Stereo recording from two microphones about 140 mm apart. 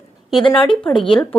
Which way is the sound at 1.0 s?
40° left (ahead or behind).